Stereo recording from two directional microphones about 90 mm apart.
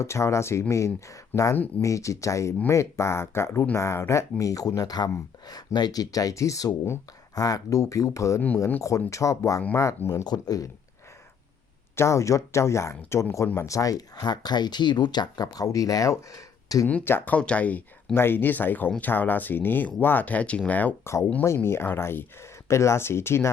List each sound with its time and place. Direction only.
0.0 s speech: 30° left (ahead or behind)
1.3 s speech: 20° left (ahead or behind)
1.8 s speech: 35° left (ahead or behind)
10.2 s speech: 50° left (ahead or behind)
11.9 s speech: 35° left (ahead or behind)
17.0 s speech: 25° left (ahead or behind)
21.0 s speech: 30° left (ahead or behind)